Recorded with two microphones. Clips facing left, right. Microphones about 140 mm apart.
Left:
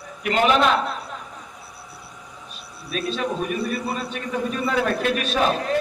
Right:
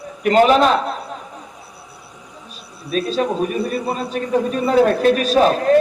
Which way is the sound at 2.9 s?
35° right (ahead or behind).